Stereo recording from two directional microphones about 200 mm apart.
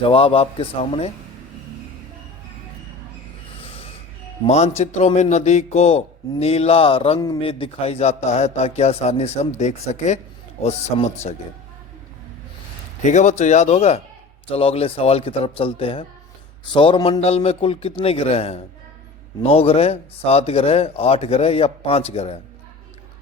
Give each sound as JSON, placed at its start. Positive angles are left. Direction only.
{"t": 0.0, "sound": "speech", "side_deg": 30}
{"t": 3.6, "sound": "a sound", "side_deg": 30}
{"t": 4.4, "sound": "a man's voice", "side_deg": 35}
{"t": 13.0, "sound": "a man's voice", "side_deg": 35}